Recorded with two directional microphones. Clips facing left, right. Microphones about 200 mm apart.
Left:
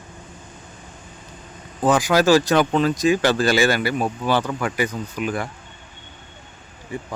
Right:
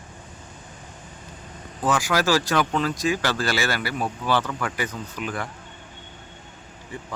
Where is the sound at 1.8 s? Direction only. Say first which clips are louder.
Left 6 dB; 20° left (ahead or behind).